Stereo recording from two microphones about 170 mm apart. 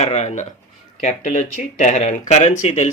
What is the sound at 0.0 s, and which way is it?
Speech, 40° left (ahead or behind).